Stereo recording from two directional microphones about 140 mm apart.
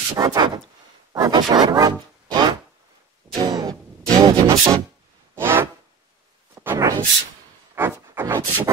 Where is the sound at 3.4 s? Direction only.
25° right (ahead or behind).